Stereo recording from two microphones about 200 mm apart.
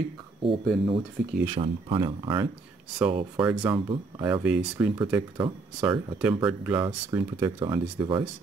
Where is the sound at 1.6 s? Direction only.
25° right (ahead or behind).